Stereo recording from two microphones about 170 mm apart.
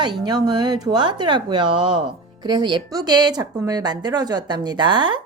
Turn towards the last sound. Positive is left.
turn(degrees=-25)  # may be behind; listen again after turning